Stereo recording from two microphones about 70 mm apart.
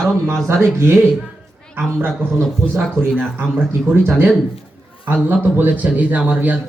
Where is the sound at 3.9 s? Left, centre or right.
Right.